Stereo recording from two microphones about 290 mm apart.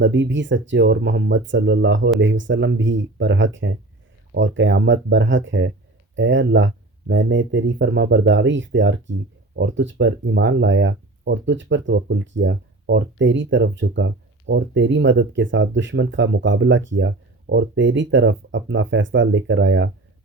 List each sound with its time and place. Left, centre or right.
0.0 s speech: right